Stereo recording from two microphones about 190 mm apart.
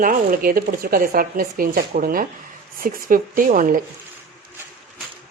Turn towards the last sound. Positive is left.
turn(degrees=-45)  # may be behind; listen again after turning